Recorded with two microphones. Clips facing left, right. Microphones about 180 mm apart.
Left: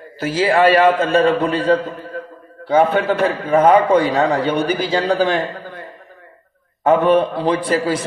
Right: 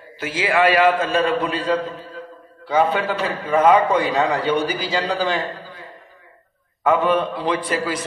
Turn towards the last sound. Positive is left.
turn(degrees=30)  # may be behind; listen again after turning